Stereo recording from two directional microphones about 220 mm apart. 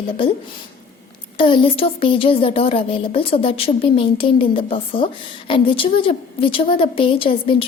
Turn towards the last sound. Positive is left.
turn(degrees=25)  # may be behind; listen again after turning